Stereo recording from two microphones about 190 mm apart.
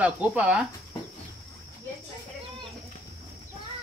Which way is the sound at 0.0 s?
5° right (ahead or behind).